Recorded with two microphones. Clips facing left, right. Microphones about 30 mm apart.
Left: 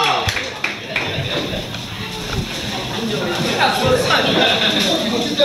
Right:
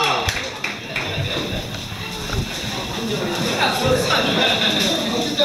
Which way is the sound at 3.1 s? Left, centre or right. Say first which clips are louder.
Left 2 dB; centre.